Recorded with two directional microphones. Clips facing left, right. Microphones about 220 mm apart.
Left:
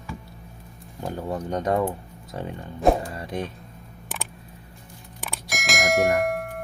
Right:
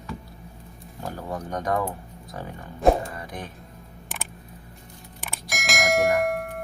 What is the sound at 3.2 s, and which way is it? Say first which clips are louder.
Music: left 6 dB; 25° left (ahead or behind).